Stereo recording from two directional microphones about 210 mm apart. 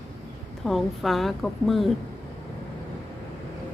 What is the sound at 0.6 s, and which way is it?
A woman's voice, centre (ahead or behind).